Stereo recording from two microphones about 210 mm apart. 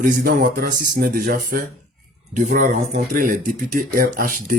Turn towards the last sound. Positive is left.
turn(degrees=-40)  # may be behind; listen again after turning